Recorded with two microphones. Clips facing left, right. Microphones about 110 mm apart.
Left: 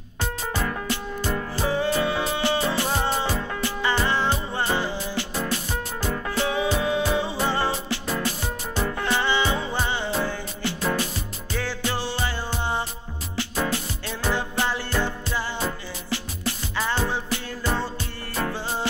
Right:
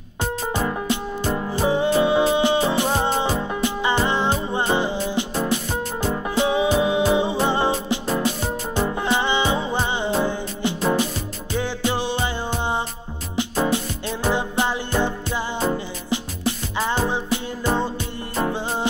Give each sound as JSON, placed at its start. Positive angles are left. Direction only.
{"t": 0.2, "sound": "music", "side_deg": -20}